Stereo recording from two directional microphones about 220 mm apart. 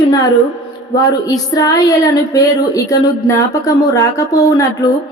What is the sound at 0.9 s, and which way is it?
A woman's voice, 15° left (ahead or behind).